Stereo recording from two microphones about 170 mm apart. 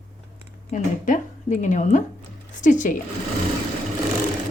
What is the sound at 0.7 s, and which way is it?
A woman's voice, 50° left (ahead or behind).